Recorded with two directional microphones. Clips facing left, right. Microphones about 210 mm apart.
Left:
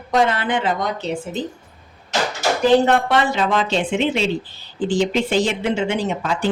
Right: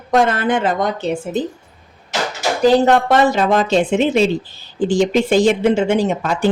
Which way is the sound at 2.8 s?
45° right (ahead or behind).